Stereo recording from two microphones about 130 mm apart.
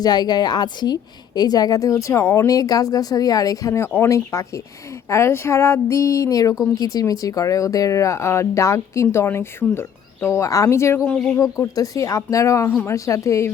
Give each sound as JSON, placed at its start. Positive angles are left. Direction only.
{"t": 0.0, "sound": "a woman's voice", "side_deg": 30}
{"t": 11.1, "sound": "speech", "side_deg": 5}
{"t": 11.5, "sound": "a woman's voice", "side_deg": 25}